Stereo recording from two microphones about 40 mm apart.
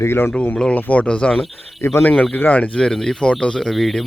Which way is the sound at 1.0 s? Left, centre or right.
Left.